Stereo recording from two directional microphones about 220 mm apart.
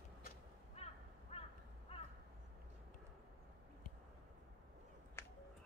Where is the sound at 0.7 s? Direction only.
25° left (ahead or behind).